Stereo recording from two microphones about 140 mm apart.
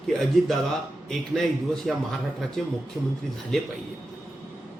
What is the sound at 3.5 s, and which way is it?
Speech, 5° left (ahead or behind).